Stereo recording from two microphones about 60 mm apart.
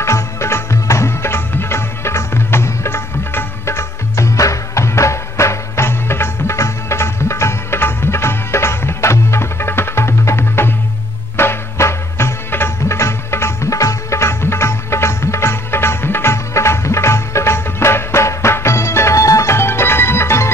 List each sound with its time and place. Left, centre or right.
0.0 s music: left
13.7 s music: left